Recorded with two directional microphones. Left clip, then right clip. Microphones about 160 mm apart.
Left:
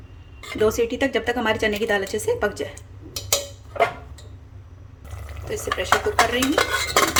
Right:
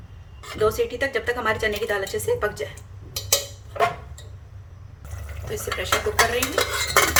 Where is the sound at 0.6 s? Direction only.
35° left (ahead or behind).